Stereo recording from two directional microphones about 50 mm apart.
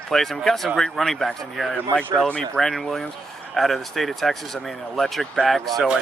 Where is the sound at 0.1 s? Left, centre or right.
Centre.